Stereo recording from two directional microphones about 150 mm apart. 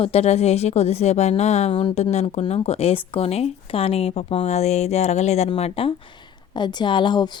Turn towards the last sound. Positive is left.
turn(degrees=30)  # may be behind; listen again after turning